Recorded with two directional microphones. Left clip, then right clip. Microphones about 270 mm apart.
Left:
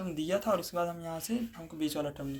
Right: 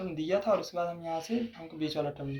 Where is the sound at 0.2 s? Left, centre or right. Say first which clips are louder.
Right 2 dB; left.